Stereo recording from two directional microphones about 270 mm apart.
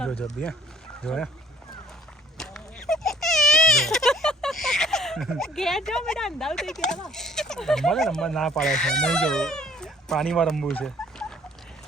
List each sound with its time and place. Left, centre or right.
0.0 s a sound: centre
1.0 s speech: centre
2.4 s speech: centre